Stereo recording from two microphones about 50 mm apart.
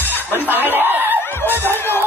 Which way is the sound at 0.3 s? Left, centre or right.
Right.